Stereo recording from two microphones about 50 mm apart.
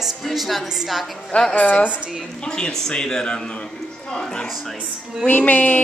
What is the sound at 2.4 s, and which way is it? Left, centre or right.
A man's voice, centre.